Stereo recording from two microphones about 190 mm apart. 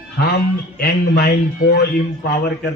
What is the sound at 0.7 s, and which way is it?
A man's voice, 55° left (ahead or behind).